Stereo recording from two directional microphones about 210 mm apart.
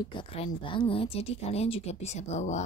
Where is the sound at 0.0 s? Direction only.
25° left (ahead or behind).